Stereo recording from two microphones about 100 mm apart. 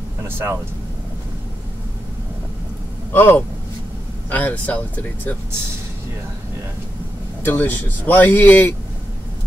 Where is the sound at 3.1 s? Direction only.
20° left (ahead or behind).